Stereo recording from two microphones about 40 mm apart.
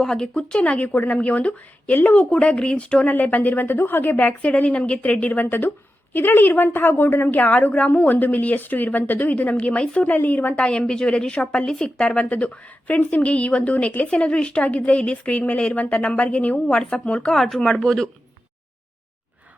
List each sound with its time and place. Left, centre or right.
0.0 s speech: centre
0.3 s a woman's voice: left
2.3 s a woman's voice: left
3.1 s a woman's voice: left
4.2 s a woman's voice: left
5.3 s a woman's voice: left
7.3 s a woman's voice: left
10.0 s a woman's voice: left
10.5 s a woman's voice: left
17.3 s speech: centre